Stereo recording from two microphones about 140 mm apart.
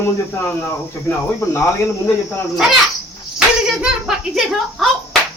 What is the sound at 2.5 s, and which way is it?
Speech, 5° right (ahead or behind).